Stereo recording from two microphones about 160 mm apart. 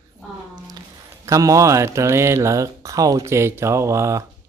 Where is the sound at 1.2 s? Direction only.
20° right (ahead or behind).